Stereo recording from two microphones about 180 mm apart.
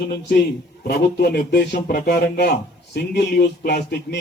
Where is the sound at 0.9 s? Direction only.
60° left (ahead or behind).